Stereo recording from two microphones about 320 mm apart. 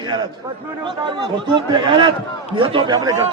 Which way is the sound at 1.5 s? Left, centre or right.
Centre.